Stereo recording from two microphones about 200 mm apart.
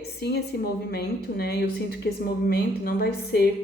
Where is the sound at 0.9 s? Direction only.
50° left (ahead or behind).